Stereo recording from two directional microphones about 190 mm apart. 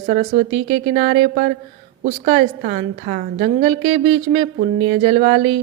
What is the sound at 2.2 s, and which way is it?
A woman's voice, 40° right (ahead or behind).